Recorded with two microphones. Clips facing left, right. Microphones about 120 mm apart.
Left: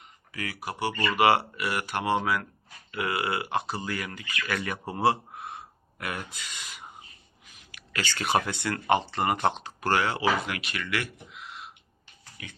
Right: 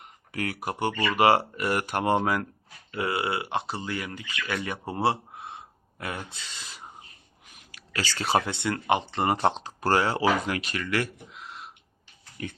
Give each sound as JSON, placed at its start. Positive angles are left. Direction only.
{"t": 0.0, "sound": "speech", "side_deg": -60}
{"t": 2.9, "sound": "speech", "side_deg": -30}
{"t": 7.7, "sound": "a sound", "side_deg": -35}
{"t": 8.1, "sound": "speech", "side_deg": -30}
{"t": 9.5, "sound": "speech", "side_deg": -35}